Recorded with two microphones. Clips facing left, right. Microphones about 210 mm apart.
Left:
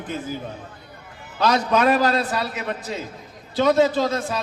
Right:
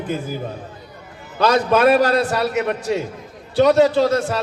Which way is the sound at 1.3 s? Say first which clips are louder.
Right 4 dB; 60° right (ahead or behind).